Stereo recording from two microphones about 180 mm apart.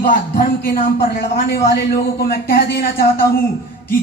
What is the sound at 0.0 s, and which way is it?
A man's voice, 50° left (ahead or behind).